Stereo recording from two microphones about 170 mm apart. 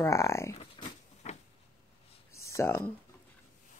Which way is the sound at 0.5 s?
40° left (ahead or behind).